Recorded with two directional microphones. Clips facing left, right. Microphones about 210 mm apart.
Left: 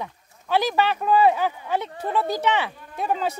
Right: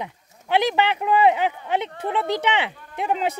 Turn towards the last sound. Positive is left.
turn(degrees=-20)  # may be behind; listen again after turning